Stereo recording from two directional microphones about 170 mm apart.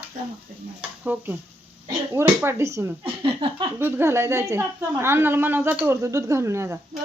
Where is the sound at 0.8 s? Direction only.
10° right (ahead or behind).